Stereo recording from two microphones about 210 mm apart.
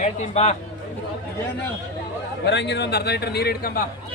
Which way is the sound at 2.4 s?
55° left (ahead or behind).